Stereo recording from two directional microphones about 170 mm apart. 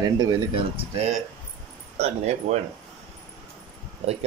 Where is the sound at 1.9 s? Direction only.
40° right (ahead or behind).